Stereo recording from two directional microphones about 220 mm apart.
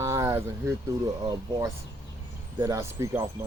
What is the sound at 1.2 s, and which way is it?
Speech, 15° right (ahead or behind).